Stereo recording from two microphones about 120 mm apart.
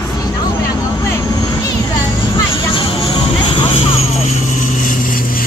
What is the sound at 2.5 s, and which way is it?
Vehicle, 45° left (ahead or behind).